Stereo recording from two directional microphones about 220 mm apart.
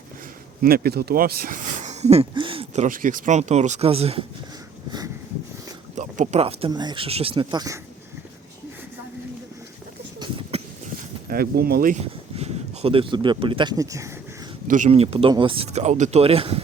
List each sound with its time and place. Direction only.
0.6 s speech: 45° right (ahead or behind); by 4.3 s 25° right (ahead or behind)
4.9 s a sound: 20° right (ahead or behind)
6.0 s speech: 30° right (ahead or behind)
10.2 s a sound: 25° right (ahead or behind)
11.3 s speech: 45° right (ahead or behind); by 14.2 s 15° right (ahead or behind)
14.7 s speech: 30° right (ahead or behind)